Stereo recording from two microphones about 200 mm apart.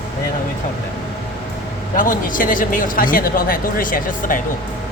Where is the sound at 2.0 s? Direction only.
45° left (ahead or behind).